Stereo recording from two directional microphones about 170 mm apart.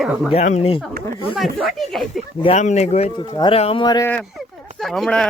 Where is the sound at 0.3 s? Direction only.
40° left (ahead or behind).